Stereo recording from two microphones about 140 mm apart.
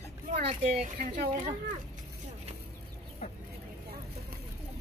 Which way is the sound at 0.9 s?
65° right (ahead or behind).